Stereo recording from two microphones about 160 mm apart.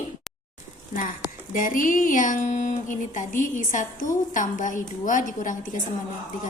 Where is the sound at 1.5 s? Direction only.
55° left (ahead or behind).